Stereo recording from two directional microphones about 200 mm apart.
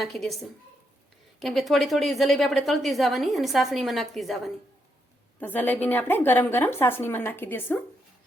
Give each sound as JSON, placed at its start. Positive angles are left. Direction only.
{"t": 0.0, "sound": "a woman's voice", "side_deg": 0}
{"t": 1.4, "sound": "a woman's voice", "side_deg": 0}